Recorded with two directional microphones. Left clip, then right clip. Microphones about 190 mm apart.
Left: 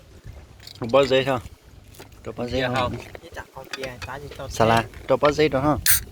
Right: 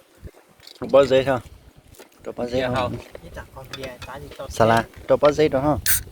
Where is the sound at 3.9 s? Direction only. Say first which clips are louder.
Left 1 dB; 40° left (ahead or behind).